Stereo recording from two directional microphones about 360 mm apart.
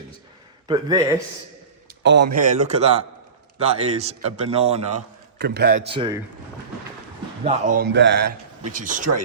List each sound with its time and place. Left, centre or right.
0.7 s speech: centre
2.0 s a man's voice: right
5.9 s speech: centre
7.4 s a man's voice: right